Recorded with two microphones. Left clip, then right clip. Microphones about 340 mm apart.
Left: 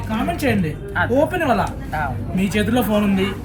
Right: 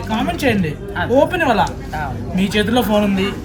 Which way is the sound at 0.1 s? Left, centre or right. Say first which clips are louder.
Right 3 dB; centre.